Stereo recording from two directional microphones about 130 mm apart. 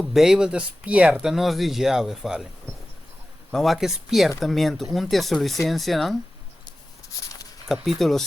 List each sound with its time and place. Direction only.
0.0 s speech: centre (ahead or behind)
3.5 s speech: centre (ahead or behind)
7.7 s speech: centre (ahead or behind)